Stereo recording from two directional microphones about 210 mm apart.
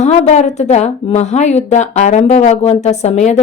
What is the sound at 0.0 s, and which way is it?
Speech, 30° left (ahead or behind).